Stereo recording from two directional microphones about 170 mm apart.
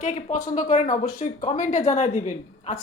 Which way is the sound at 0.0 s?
45° left (ahead or behind).